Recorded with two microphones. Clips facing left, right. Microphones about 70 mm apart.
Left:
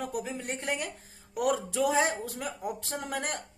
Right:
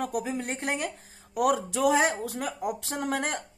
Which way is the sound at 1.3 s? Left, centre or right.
Right.